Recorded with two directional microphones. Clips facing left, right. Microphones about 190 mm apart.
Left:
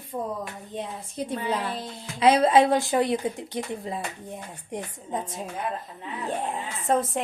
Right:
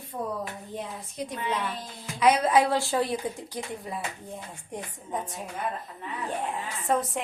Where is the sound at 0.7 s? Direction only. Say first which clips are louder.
Left 2 dB; 25° left (ahead or behind).